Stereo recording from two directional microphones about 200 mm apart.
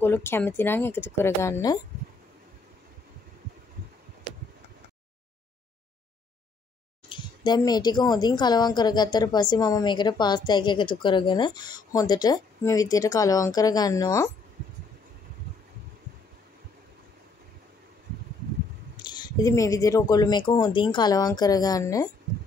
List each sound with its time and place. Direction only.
0.0 s speech: 10° left (ahead or behind)
7.1 s a woman's voice: 20° left (ahead or behind)
18.9 s a woman's voice: 20° left (ahead or behind)